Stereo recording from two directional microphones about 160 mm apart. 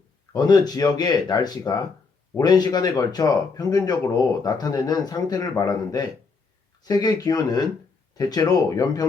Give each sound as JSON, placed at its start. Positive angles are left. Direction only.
{"t": 0.3, "sound": "speech", "side_deg": 25}